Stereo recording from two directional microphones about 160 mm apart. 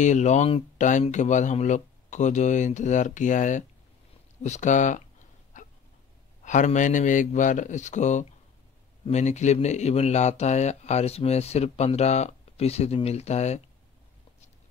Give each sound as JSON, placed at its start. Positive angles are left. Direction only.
{"t": 0.0, "sound": "a man's voice", "side_deg": 50}
{"t": 5.5, "sound": "dog", "side_deg": 50}
{"t": 6.4, "sound": "a man's voice", "side_deg": 50}